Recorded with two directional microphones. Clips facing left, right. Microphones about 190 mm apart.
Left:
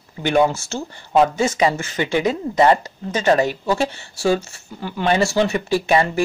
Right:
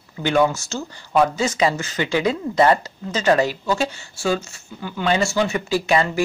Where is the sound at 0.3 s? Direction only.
20° left (ahead or behind).